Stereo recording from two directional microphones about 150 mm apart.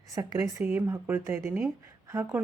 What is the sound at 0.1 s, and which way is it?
A woman's voice, 25° right (ahead or behind).